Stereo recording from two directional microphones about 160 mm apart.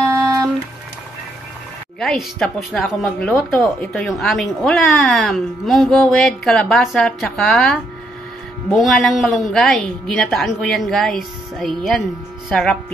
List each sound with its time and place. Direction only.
0.0 s music: 20° right (ahead or behind)
2.0 s a woman's voice: centre (ahead or behind)